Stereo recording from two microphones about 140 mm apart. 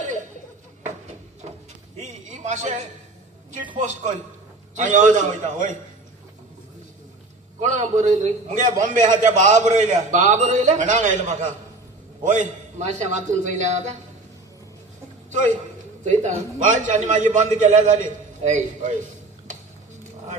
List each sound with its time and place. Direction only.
0.9 s a sound: 55° right (ahead or behind)
3.8 s a man's voice: 60° right (ahead or behind)
7.6 s a man's voice: 60° right (ahead or behind)
15.3 s a man's voice: 60° right (ahead or behind)